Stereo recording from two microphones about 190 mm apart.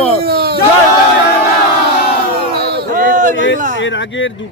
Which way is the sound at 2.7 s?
50° right (ahead or behind).